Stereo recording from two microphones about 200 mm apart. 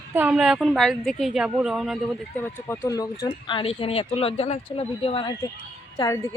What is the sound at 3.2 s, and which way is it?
Speech, 25° left (ahead or behind).